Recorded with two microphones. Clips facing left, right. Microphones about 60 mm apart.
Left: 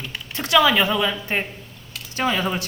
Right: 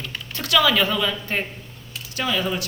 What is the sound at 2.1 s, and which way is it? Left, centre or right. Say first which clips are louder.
Speech: left 2 dB; left.